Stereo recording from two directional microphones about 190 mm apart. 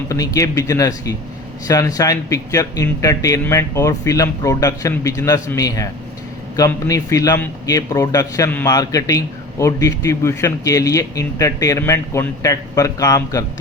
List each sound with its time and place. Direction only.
0.1 s a man's voice: 20° left (ahead or behind)